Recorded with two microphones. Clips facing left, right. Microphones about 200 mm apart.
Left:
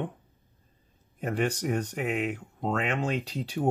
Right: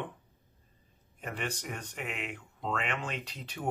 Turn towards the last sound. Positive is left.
turn(degrees=35)  # may be behind; listen again after turning